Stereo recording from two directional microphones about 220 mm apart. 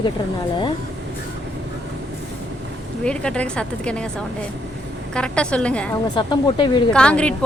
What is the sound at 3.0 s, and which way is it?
A woman's voice, 5° left (ahead or behind).